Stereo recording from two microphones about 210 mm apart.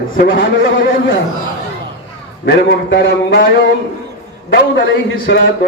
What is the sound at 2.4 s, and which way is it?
A man's voice, 55° left (ahead or behind).